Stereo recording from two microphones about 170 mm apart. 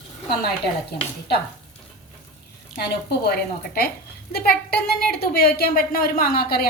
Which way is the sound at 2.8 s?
70° left (ahead or behind).